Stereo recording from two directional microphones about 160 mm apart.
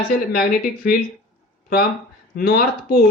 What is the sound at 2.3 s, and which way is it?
Speech, 75° left (ahead or behind).